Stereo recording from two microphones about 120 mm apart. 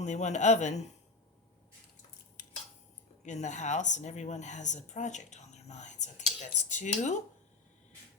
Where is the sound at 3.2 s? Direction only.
80° left.